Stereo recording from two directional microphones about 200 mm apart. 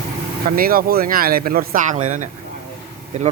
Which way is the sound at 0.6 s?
45° right (ahead or behind).